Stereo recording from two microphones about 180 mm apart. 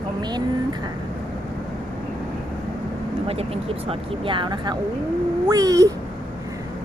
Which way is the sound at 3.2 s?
35° right (ahead or behind).